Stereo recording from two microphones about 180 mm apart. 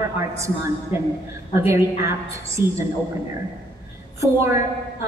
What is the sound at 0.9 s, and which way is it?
Speech, 15° right (ahead or behind).